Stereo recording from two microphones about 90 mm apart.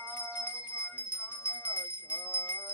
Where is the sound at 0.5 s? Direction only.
15° right (ahead or behind).